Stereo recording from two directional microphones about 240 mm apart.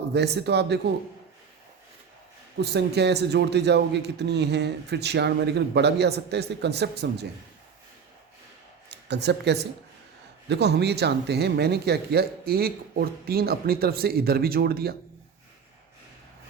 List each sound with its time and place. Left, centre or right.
0.1 s a man's voice: right
2.6 s a man's voice: right
8.9 s speech: right